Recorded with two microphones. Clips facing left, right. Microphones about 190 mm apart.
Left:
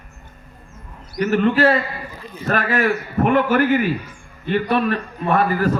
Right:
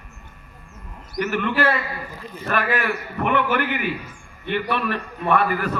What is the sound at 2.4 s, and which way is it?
A man's voice, 45° left (ahead or behind).